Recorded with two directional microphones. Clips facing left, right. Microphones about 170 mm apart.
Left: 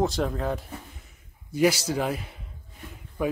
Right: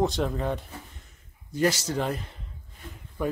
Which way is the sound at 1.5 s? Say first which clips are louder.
Left 3 dB; 10° left (ahead or behind).